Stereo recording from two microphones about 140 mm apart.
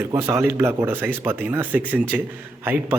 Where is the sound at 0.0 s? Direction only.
20° right (ahead or behind).